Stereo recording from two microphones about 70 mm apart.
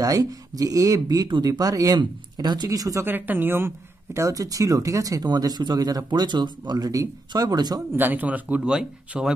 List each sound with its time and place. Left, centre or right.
0.0 s speech: right
3.0 s speech: right
6.9 s speech: right
7.9 s speech: right
8.6 s speech: centre